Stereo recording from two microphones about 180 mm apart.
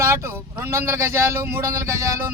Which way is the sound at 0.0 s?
15° right (ahead or behind).